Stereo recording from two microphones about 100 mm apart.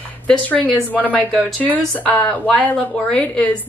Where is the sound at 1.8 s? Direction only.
10° left (ahead or behind).